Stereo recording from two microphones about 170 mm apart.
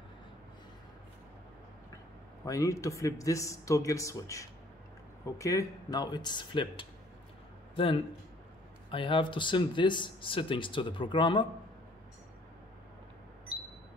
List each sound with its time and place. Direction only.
2.4 s speech: 20° left (ahead or behind)